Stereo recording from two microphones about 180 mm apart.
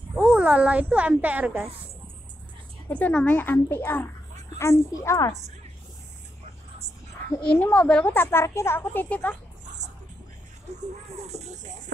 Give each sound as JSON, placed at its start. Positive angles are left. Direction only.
{"t": 0.4, "sound": "a woman's voice", "side_deg": -5}
{"t": 2.9, "sound": "a woman's voice", "side_deg": 5}
{"t": 7.4, "sound": "a woman's voice", "side_deg": 10}
{"t": 10.7, "sound": "speech", "side_deg": -40}
{"t": 11.1, "sound": "a sound", "side_deg": -35}